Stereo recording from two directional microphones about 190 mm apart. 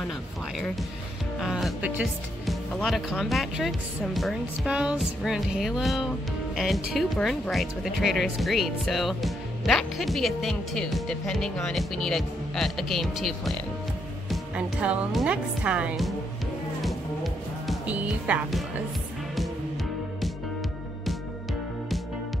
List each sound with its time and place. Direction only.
1.4 s speech: 5° right (ahead or behind)
16.8 s music: centre (ahead or behind)